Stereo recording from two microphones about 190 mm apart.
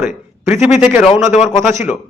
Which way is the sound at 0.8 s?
5° right (ahead or behind).